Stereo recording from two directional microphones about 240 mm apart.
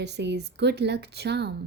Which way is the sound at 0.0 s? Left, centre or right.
Right.